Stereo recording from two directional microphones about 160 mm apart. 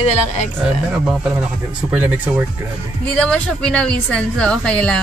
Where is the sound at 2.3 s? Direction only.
10° right (ahead or behind).